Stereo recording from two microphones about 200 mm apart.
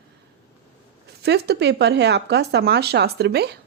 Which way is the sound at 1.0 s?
55° right (ahead or behind).